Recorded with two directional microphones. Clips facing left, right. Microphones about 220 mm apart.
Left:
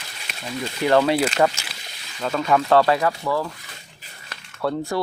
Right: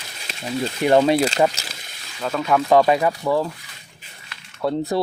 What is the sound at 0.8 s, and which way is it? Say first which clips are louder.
Speech: right 2 dB; 20° right (ahead or behind).